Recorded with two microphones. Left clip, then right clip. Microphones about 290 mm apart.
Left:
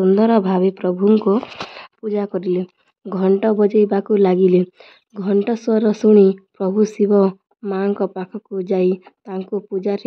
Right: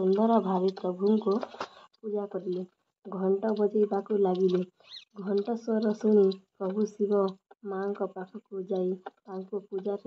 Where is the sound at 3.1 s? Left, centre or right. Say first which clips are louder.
Left 12 dB; left.